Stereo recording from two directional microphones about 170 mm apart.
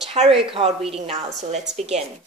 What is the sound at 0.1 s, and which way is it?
A woman's voice, 35° right (ahead or behind).